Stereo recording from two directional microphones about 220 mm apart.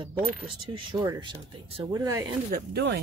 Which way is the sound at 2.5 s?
50° right (ahead or behind).